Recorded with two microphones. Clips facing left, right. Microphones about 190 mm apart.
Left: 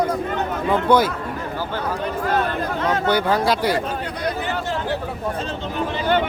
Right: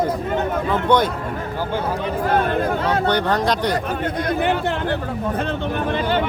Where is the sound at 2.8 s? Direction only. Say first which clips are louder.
Right 1 dB; 35° right (ahead or behind).